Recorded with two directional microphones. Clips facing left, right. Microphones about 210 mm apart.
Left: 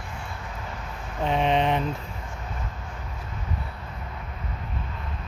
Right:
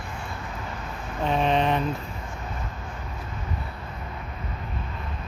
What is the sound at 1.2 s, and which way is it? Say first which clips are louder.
Speech: even; 20° left (ahead or behind).